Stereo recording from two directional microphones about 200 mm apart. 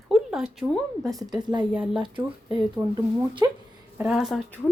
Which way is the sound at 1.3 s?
20° right (ahead or behind).